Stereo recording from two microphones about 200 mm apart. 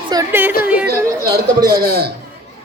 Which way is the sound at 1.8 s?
50° right (ahead or behind).